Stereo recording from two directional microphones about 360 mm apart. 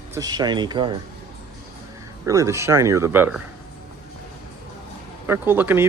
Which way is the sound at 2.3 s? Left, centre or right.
Centre.